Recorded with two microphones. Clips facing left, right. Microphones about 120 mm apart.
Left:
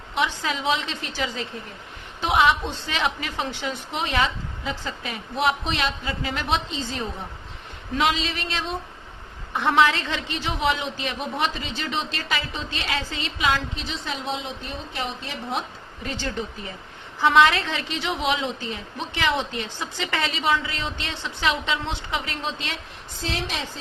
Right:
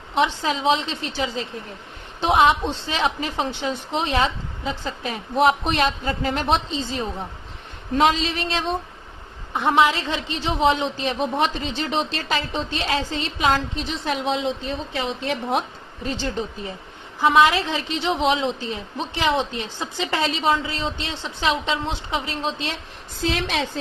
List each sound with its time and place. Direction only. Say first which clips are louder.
0.1 s a woman's voice: right 4 dB; 30° right (ahead or behind); by 6.6 s 45° right (ahead or behind)
7.9 s a woman's voice: right 4 dB; 40° right (ahead or behind)
9.5 s a woman's voice: right 1 dB; 20° right (ahead or behind)
10.8 s a woman's voice: right 6 dB; 40° right (ahead or behind); by 14.5 s 90° right
15.3 s a woman's voice: right 9 dB; 60° right (ahead or behind)
16.0 s a woman's voice: right 3 dB; 25° right (ahead or behind)
23.3 s a woman's voice: right 5 dB; 70° right (ahead or behind)